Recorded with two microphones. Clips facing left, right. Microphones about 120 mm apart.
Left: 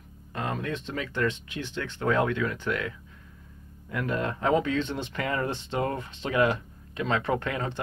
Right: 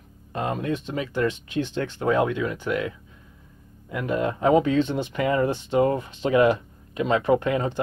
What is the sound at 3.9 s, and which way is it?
Speech, 15° right (ahead or behind).